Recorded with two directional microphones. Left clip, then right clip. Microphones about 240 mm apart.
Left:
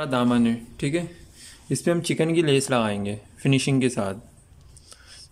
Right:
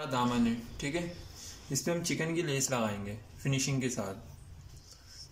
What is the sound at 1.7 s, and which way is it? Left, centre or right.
Speech, left.